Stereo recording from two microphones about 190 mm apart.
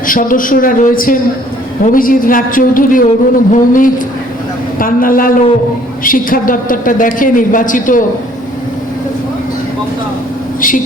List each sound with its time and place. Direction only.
0.1 s speech: 45° left (ahead or behind)